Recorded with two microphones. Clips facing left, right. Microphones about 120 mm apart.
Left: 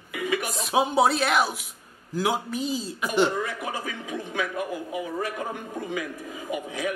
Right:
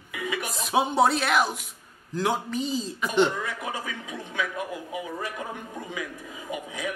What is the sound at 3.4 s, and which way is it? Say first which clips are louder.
A man's voice: left 2 dB; 40° left (ahead or behind).